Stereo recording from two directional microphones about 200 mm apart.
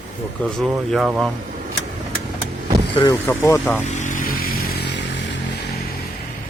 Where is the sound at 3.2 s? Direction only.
10° left (ahead or behind).